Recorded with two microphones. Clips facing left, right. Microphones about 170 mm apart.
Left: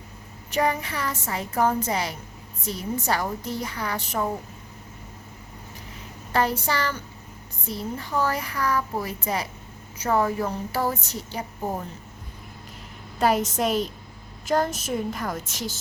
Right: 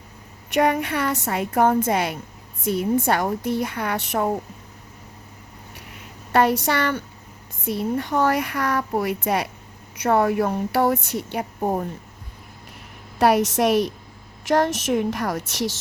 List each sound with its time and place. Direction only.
0.5 s speech: 65° right (ahead or behind)
6.3 s a woman's voice: 65° right (ahead or behind)
13.1 s a woman's voice: 70° right (ahead or behind)